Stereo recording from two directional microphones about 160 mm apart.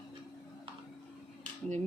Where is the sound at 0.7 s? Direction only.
35° right (ahead or behind).